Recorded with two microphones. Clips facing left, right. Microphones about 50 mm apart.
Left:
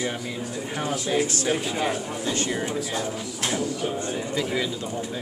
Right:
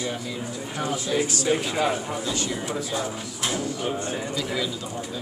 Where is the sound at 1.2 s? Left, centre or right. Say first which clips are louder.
Right 1 dB; left.